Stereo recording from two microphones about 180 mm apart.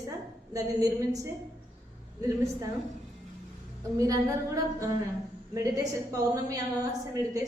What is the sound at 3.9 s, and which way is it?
A woman's voice, 20° right (ahead or behind).